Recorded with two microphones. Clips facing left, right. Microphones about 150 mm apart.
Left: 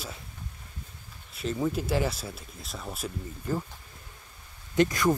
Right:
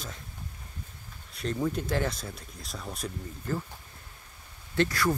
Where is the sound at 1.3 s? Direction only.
5° left (ahead or behind).